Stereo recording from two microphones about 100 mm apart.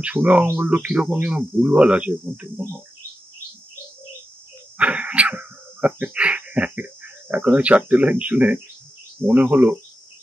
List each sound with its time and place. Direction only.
0.0 s speech: 15° right (ahead or behind)
4.7 s dog: 15° right (ahead or behind)
9.2 s speech: 15° right (ahead or behind)